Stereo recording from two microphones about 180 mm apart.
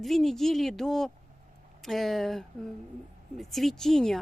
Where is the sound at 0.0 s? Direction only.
Centre (ahead or behind).